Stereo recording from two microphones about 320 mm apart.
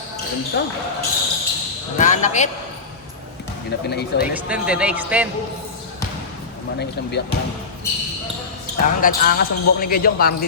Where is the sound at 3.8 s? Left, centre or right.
Left.